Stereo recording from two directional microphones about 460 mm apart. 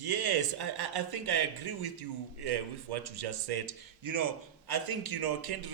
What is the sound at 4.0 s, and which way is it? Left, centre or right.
A man's voice, right.